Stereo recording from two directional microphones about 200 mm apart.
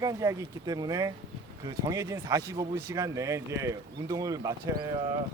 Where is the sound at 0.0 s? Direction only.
15° right (ahead or behind).